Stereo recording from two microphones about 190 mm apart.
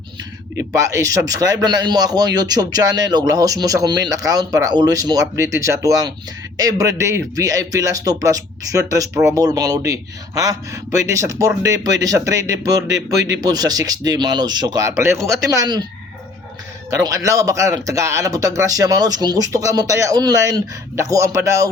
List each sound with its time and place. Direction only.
0.5 s speech: 15° right (ahead or behind)
16.9 s speech: 15° right (ahead or behind)